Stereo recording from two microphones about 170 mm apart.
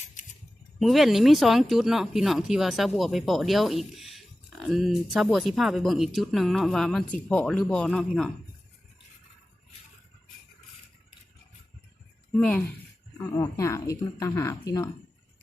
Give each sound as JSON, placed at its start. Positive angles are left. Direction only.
{"t": 0.8, "sound": "speech", "side_deg": 0}
{"t": 12.4, "sound": "speech", "side_deg": 10}
{"t": 13.3, "sound": "speech", "side_deg": 20}